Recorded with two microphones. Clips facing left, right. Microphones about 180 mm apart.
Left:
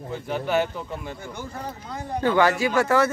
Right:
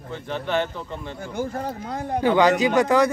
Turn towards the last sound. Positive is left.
turn(degrees=-15)  # may be behind; listen again after turning